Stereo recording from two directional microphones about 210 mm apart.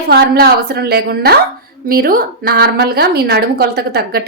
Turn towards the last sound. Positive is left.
turn(degrees=-50)  # may be behind; listen again after turning